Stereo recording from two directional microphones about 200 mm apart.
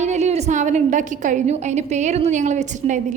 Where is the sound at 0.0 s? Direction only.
35° right (ahead or behind).